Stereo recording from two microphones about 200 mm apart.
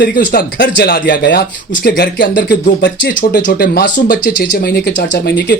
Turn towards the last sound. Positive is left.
turn(degrees=60)  # may be behind; listen again after turning